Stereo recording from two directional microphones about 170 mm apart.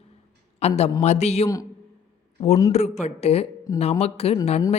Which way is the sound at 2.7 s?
40° left (ahead or behind).